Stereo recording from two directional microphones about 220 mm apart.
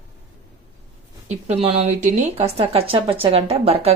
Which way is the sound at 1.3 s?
30° right (ahead or behind).